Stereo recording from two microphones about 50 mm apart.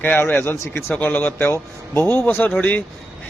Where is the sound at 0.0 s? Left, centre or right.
Left.